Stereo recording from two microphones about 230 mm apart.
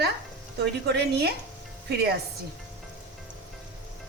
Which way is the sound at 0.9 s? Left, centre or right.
Right.